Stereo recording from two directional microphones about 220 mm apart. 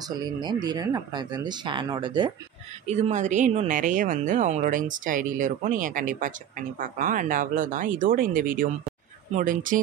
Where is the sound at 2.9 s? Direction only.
30° right (ahead or behind).